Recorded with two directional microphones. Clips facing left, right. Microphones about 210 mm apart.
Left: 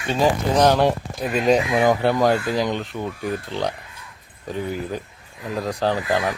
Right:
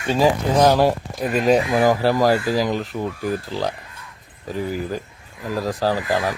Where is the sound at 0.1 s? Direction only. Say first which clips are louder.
Right 2 dB; 10° right (ahead or behind).